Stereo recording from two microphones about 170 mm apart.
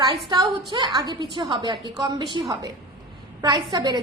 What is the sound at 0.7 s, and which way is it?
A woman's voice, 25° right (ahead or behind).